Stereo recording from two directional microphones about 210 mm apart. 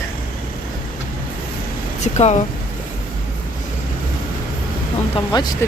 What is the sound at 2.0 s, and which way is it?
Speech, 30° left (ahead or behind).